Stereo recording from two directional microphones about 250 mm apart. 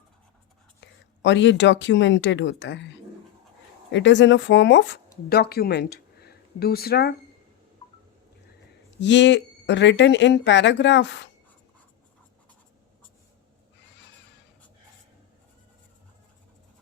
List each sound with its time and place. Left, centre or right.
0.8 s speech: left
3.9 s speech: left
9.0 s speech: left